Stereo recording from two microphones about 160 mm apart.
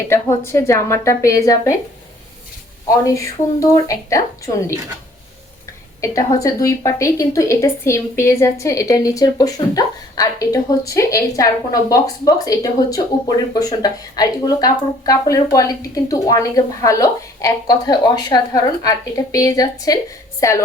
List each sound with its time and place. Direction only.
0.1 s a woman's voice: 15° left (ahead or behind)
3.2 s a woman's voice: 20° left (ahead or behind)
6.0 s a woman's voice: 20° left (ahead or behind)